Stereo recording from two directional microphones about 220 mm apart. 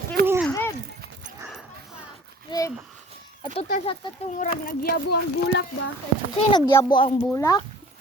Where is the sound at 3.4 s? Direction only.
25° left (ahead or behind).